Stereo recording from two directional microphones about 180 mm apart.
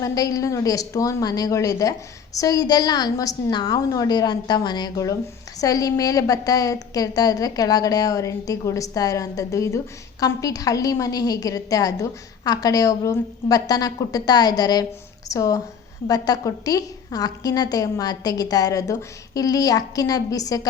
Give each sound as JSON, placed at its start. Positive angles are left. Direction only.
{"t": 0.0, "sound": "a woman's voice", "side_deg": 20}